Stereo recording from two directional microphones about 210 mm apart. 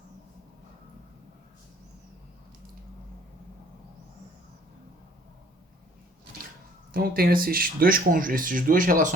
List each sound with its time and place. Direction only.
6.9 s speech: 45° right (ahead or behind)